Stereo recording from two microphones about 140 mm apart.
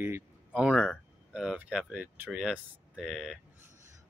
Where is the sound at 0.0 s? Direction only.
10° right (ahead or behind).